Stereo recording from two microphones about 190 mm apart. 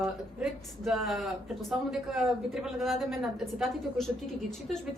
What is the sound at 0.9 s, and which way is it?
Speech, centre (ahead or behind).